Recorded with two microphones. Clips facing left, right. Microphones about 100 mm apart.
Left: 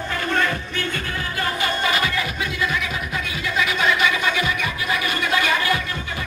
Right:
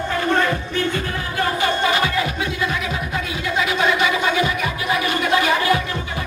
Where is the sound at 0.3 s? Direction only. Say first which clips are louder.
Right 3 dB; 15° right (ahead or behind).